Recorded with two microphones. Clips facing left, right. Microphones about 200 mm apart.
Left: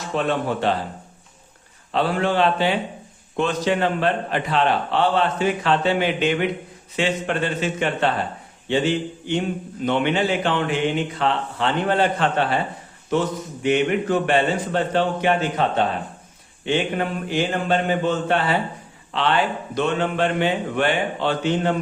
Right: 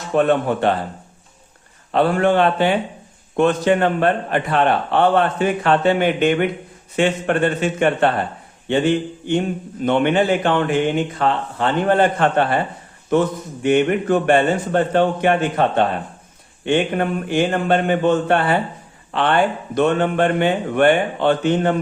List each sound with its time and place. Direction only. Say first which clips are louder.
0.1 s speech: right 6 dB; 55° right (ahead or behind)
1.9 s a man's voice: right 5 dB; 55° right (ahead or behind)
16.6 s a man's voice: right 4 dB; 50° right (ahead or behind)